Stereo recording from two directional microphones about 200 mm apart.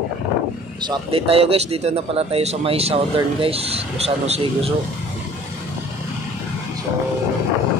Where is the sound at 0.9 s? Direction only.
25° right (ahead or behind).